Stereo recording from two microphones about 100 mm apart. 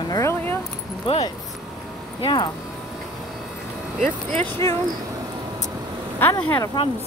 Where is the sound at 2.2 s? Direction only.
45° left (ahead or behind).